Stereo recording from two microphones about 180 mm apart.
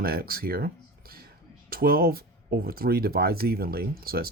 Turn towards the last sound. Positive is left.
turn(degrees=-55)  # may be behind; listen again after turning